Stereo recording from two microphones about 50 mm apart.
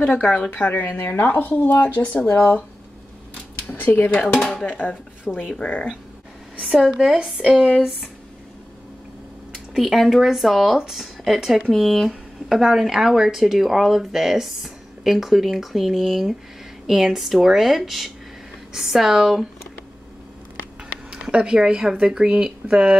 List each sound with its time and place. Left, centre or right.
0.0 s speech: left
2.2 s speech: left
3.7 s speech: left
4.2 s speech: centre
4.7 s speech: left
5.4 s speech: centre
5.7 s speech: left
6.9 s speech: centre
9.5 s speech: centre
11.7 s speech: centre
21.1 s speech: centre